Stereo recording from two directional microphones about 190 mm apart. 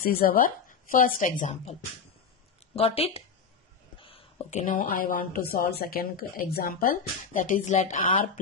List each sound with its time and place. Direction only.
0.0 s a woman's voice: 50° left (ahead or behind)